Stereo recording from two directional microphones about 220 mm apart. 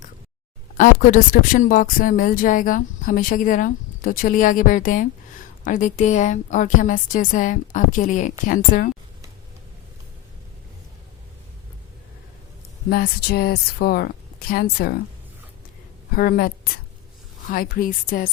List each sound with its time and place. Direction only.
0.8 s a woman's voice: 35° left (ahead or behind)
12.9 s speech: 45° left (ahead or behind)
16.1 s a woman's voice: 40° left (ahead or behind)